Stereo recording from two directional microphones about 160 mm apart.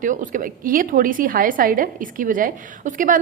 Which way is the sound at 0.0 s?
55° right (ahead or behind).